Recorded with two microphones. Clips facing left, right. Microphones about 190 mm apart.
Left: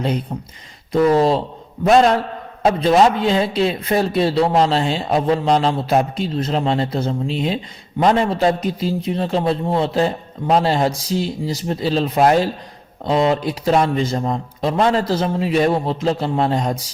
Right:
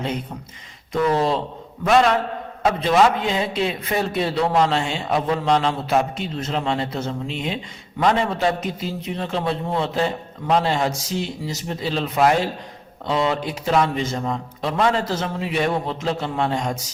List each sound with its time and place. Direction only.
1.1 s a man's voice: 35° left (ahead or behind)